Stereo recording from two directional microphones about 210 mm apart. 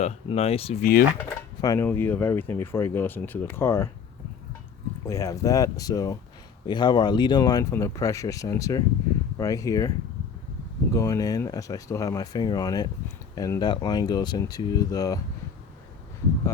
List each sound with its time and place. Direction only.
0.0 s speech: 30° left (ahead or behind)
0.8 s speech: 45° left (ahead or behind)
1.6 s speech: 15° left (ahead or behind)
5.0 s speech: 15° left (ahead or behind)
10.9 s speech: 15° left (ahead or behind)